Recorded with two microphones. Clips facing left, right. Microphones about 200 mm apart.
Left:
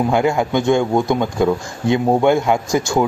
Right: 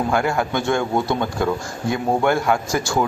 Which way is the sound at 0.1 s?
20° left (ahead or behind).